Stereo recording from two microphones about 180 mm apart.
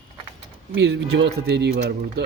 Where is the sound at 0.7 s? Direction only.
75° right (ahead or behind).